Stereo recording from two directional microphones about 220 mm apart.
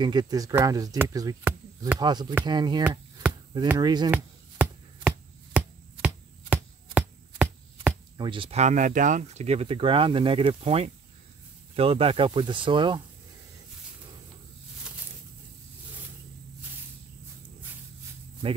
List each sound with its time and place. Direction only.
0.0 s speech: 20° right (ahead or behind)
4.1 s chopping: 5° right (ahead or behind)
8.2 s speech: 25° right (ahead or behind)